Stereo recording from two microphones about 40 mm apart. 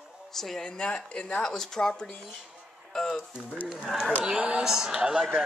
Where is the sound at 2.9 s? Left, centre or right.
Centre.